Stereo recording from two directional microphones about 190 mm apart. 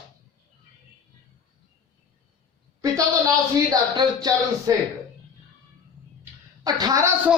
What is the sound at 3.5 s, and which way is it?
Speech, 20° right (ahead or behind).